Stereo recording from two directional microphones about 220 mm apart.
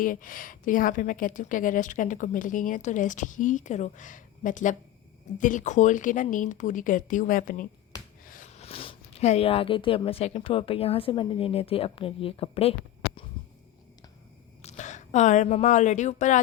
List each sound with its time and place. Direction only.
0.0 s a woman's voice: 40° left (ahead or behind)
14.6 s a woman's voice: 30° left (ahead or behind)